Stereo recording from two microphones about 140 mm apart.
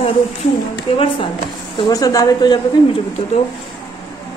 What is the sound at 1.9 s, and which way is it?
Speech, 25° left (ahead or behind).